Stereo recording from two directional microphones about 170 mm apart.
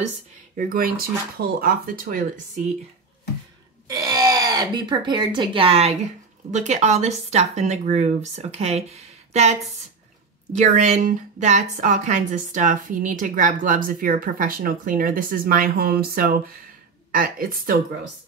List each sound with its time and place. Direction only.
0.6 s speech: 55° right (ahead or behind)
3.8 s a woman's voice: 20° right (ahead or behind); by 17.7 s 55° right (ahead or behind)